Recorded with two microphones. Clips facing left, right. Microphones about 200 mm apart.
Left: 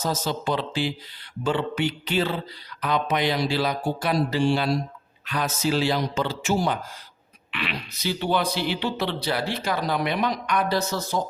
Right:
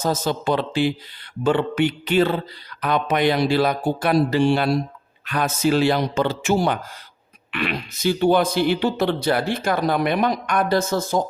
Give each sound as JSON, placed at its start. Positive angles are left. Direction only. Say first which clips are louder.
{"t": 0.0, "sound": "speech", "louder": "right 4 dB", "side_deg": -55}
{"t": 7.5, "sound": "speech", "louder": "right 6 dB", "side_deg": -50}